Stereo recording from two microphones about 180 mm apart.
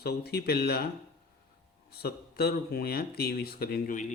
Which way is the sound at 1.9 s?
60° left (ahead or behind).